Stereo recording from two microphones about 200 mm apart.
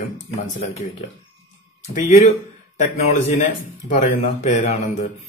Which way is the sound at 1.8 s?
40° left (ahead or behind).